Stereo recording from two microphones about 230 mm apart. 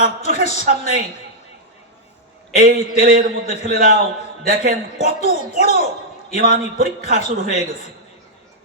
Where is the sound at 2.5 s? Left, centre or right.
Right.